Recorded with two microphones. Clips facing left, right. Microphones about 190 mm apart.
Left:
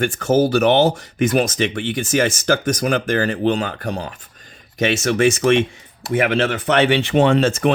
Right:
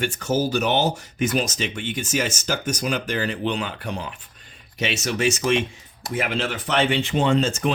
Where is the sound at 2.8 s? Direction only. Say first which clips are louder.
Left 6 dB; 50° left (ahead or behind).